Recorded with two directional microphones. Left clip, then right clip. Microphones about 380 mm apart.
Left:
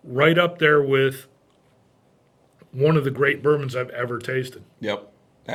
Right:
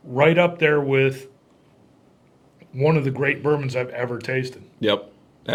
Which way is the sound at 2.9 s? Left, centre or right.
Left.